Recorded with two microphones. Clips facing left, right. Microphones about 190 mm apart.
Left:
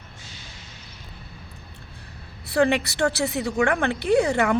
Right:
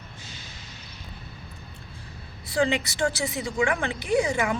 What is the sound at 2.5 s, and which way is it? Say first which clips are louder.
A woman's voice: left 4 dB; 65° left (ahead or behind).